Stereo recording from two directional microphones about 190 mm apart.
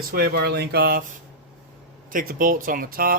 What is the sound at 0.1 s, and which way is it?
Speech, 55° right (ahead or behind).